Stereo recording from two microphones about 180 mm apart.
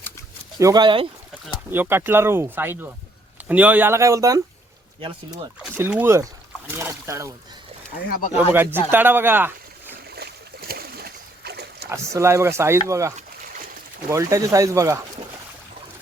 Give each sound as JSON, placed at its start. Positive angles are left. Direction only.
{"t": 0.6, "sound": "speech", "side_deg": -20}
{"t": 1.7, "sound": "speech", "side_deg": -10}
{"t": 5.7, "sound": "speech", "side_deg": -10}
{"t": 8.4, "sound": "speech", "side_deg": -10}
{"t": 10.1, "sound": "boat", "side_deg": -60}
{"t": 11.9, "sound": "speech", "side_deg": -15}